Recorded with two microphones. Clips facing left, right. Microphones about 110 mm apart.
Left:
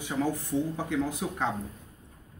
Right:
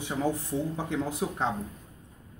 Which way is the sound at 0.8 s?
25° right (ahead or behind).